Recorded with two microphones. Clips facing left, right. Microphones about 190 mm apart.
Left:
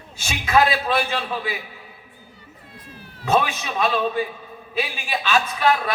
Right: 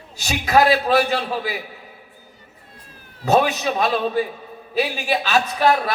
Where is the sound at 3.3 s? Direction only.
40° right (ahead or behind).